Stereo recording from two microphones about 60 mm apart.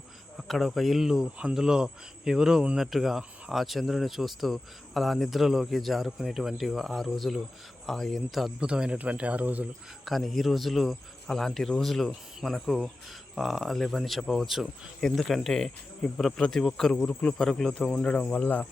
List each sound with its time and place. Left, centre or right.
0.3 s speech: centre
8.6 s speech: centre
10.1 s speech: centre; by 18.7 s left